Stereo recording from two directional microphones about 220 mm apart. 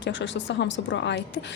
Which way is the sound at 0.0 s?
55° left (ahead or behind).